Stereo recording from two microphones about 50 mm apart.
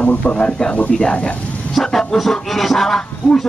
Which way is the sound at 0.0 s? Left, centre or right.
Left.